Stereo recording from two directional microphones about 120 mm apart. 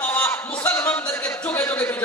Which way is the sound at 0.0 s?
15° left (ahead or behind).